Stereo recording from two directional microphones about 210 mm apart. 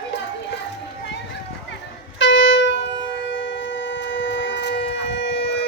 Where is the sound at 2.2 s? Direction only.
60° left (ahead or behind).